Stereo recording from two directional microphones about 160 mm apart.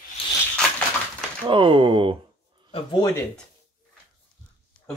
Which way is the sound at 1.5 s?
30° right (ahead or behind).